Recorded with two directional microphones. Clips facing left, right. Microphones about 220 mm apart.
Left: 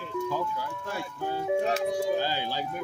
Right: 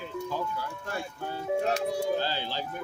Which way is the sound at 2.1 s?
15° left (ahead or behind).